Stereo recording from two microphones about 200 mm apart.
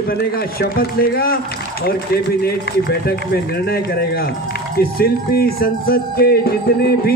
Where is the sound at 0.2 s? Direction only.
50° left (ahead or behind).